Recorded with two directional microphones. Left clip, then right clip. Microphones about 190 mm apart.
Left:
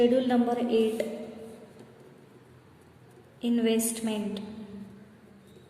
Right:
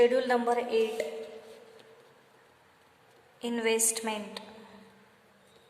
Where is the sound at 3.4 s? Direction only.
40° right (ahead or behind).